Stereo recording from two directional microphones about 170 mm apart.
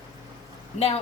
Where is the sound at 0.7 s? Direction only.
35° left (ahead or behind).